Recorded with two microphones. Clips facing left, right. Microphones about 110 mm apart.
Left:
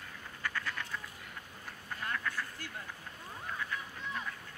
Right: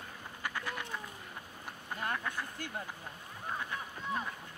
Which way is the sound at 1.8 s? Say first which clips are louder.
Right 1 dB; 25° right (ahead or behind).